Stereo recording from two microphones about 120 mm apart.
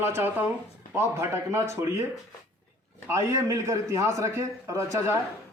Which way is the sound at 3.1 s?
25° right (ahead or behind).